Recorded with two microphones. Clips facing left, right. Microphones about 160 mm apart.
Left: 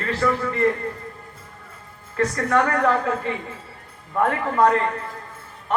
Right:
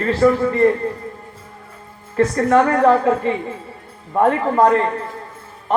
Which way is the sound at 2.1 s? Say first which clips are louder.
Right 6 dB; 30° right (ahead or behind).